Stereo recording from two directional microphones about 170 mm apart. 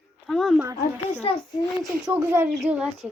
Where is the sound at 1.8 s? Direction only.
Centre (ahead or behind).